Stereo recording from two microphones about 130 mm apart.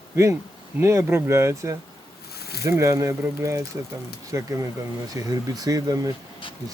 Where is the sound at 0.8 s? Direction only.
20° right (ahead or behind).